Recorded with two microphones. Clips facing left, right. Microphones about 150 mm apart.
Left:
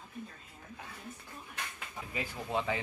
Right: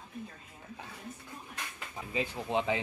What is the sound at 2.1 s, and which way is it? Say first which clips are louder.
Speech: right 4 dB; 20° right (ahead or behind).